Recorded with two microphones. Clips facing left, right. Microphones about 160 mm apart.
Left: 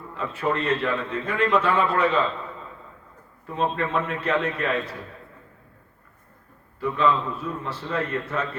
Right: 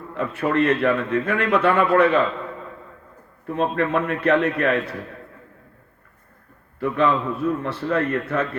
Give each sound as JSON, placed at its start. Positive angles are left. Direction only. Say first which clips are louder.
{"t": 0.1, "sound": "a man's voice", "louder": "right 4 dB", "side_deg": -60}
{"t": 3.4, "sound": "a man's voice", "louder": "right 4 dB", "side_deg": -55}
{"t": 6.7, "sound": "a man's voice", "louder": "right 2 dB", "side_deg": -60}